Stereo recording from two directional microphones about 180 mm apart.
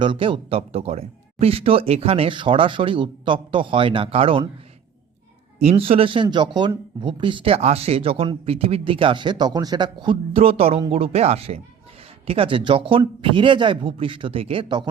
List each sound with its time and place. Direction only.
0.0 s speech: 25° right (ahead or behind)
5.5 s speech: 35° right (ahead or behind)